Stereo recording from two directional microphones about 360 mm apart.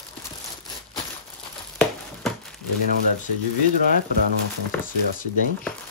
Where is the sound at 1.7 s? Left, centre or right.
Centre.